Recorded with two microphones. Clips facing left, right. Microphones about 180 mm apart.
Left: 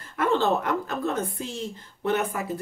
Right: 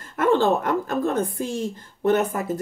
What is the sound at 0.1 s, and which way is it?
Speech, 45° right (ahead or behind).